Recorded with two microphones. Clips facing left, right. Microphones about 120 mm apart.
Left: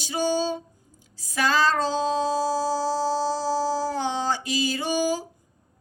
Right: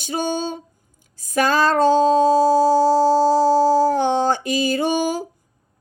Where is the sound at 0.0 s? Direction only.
55° right (ahead or behind).